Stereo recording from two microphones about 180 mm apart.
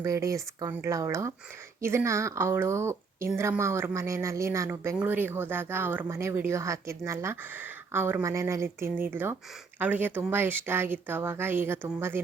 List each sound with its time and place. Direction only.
0.0 s speech: 15° right (ahead or behind)